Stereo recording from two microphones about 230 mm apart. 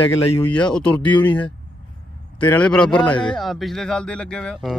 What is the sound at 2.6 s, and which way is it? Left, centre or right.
Speech, centre.